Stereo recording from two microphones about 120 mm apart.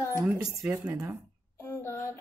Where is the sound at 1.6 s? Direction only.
20° left (ahead or behind).